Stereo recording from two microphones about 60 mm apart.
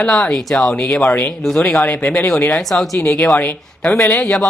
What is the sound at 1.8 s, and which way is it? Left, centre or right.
Speech, left.